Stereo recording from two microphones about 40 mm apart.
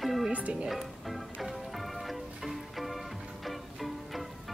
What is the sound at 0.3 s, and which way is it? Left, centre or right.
Music, right.